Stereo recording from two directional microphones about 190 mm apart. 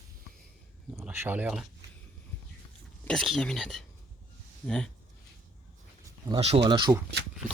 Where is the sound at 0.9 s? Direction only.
15° right (ahead or behind).